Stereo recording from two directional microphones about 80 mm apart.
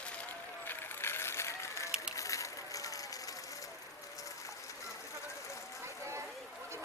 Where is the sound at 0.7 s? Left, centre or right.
Left.